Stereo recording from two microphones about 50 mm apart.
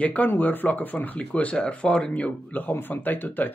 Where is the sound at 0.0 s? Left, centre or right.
Left.